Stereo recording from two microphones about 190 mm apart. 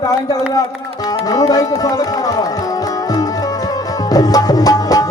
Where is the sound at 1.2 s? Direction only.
20° left (ahead or behind).